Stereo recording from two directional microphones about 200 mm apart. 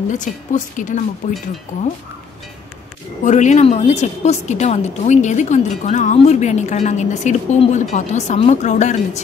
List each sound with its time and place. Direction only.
0.1 s a woman's voice: 40° left (ahead or behind)
3.3 s a woman's voice: 35° left (ahead or behind)